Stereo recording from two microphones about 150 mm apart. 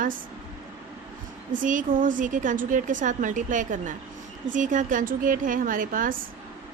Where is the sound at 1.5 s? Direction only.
60° right (ahead or behind).